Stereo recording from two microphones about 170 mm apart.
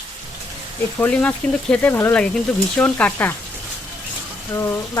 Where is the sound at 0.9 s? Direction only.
10° left (ahead or behind).